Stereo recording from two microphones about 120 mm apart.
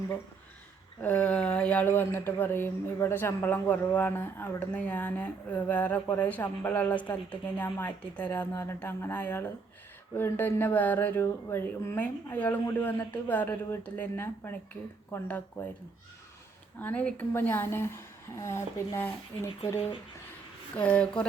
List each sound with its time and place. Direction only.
1.0 s speech: 15° left (ahead or behind)
16.7 s speech: 15° left (ahead or behind)
20.7 s speech: 10° left (ahead or behind)